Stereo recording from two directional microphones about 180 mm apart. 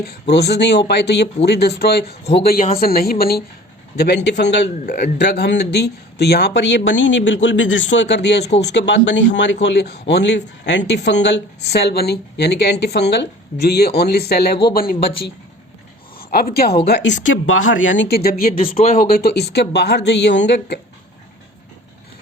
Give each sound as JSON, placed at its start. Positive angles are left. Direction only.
{"t": 0.0, "sound": "speech", "side_deg": 65}
{"t": 3.9, "sound": "speech", "side_deg": 70}
{"t": 16.1, "sound": "speech", "side_deg": 55}
{"t": 16.8, "sound": "speech", "side_deg": 70}
{"t": 18.5, "sound": "speech", "side_deg": 30}
{"t": 19.1, "sound": "speech", "side_deg": 60}